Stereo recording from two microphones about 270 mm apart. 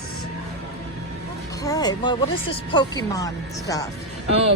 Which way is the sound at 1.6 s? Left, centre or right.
Centre.